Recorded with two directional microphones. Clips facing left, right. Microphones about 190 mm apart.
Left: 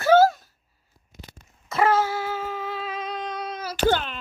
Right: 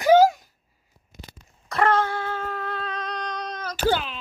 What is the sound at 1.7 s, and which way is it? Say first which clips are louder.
Humming: even; 5° left (ahead or behind).